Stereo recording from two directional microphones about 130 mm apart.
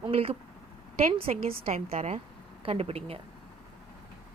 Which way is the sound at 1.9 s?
60° right (ahead or behind).